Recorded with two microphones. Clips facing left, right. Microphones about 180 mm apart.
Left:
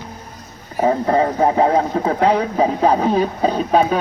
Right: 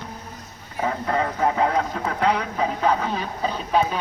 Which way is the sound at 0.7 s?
40° left (ahead or behind).